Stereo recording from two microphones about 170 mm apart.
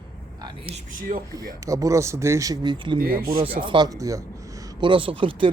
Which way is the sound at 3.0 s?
60° right (ahead or behind).